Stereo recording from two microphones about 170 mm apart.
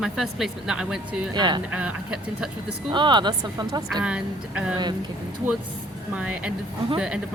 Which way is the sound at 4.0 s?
5° right (ahead or behind).